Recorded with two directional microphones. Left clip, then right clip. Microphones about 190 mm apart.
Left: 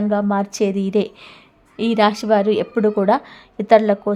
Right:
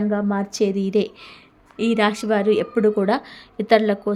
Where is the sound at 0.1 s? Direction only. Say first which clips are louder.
Left 4 dB; 30° left (ahead or behind).